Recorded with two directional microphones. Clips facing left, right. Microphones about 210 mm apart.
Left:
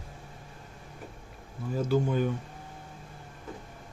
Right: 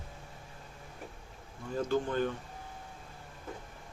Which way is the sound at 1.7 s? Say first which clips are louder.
Left 4 dB; 5° left (ahead or behind).